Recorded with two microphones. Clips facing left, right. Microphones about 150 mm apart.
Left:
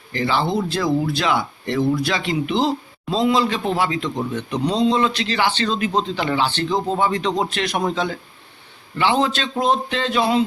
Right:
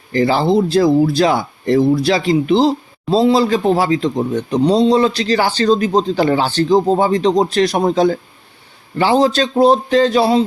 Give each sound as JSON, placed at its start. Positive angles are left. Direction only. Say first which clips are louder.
{"t": 0.1, "sound": "speech", "louder": "right 7 dB", "side_deg": -40}